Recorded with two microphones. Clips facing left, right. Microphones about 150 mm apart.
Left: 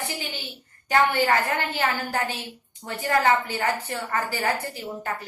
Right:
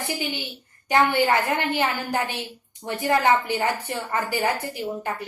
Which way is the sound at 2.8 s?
15° right (ahead or behind).